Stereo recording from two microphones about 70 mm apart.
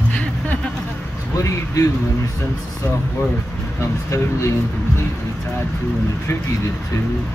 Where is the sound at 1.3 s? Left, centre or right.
Left.